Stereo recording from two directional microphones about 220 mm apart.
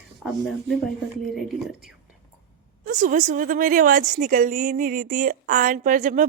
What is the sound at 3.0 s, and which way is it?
A woman's voice, 35° right (ahead or behind).